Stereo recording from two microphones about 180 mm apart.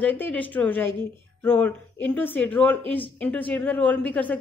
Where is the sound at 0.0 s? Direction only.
10° left (ahead or behind).